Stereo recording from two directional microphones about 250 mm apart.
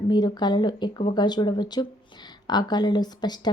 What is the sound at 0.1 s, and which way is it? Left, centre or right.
Speech, centre.